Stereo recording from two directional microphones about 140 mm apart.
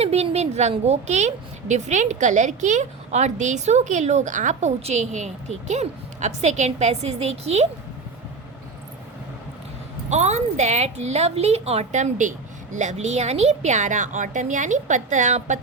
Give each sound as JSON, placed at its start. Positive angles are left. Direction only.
{"t": 0.0, "sound": "a woman's voice", "side_deg": -50}
{"t": 10.1, "sound": "a woman's voice", "side_deg": -55}